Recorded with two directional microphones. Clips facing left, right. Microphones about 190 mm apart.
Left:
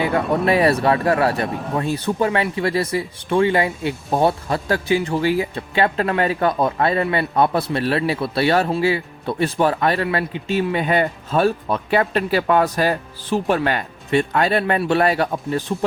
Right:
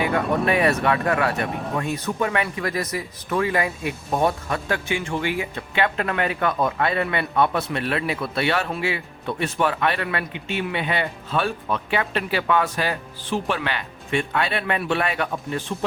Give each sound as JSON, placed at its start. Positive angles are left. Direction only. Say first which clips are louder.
{"t": 0.0, "sound": "speech", "louder": "left 3 dB", "side_deg": 30}